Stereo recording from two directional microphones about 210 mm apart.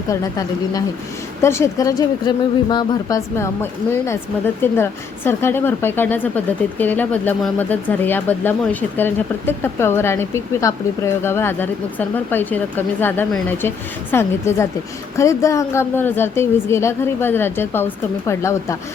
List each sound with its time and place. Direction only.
0.1 s a woman's voice: 15° left (ahead or behind)